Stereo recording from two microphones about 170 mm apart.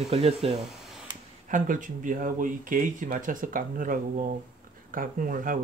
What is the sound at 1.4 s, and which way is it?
Speech, 50° right (ahead or behind).